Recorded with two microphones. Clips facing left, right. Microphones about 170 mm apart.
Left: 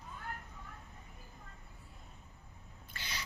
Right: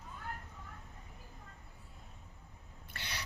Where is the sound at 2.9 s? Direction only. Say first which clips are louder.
Even; 60° right (ahead or behind).